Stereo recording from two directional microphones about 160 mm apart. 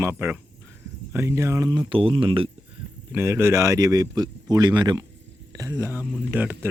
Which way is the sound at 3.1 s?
15° right (ahead or behind).